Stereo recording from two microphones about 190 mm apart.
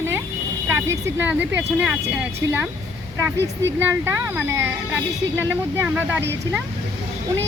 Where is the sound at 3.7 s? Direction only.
10° right (ahead or behind).